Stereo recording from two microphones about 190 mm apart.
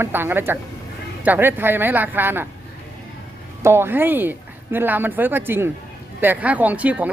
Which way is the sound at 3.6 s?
15° right (ahead or behind).